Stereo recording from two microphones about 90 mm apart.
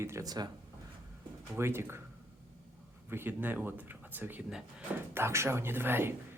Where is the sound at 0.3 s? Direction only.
50° right (ahead or behind).